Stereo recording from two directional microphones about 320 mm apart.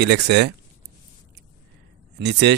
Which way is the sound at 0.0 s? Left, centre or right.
Right.